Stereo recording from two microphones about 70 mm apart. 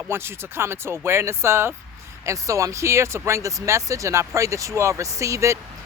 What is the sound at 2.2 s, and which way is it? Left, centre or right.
Speech, right.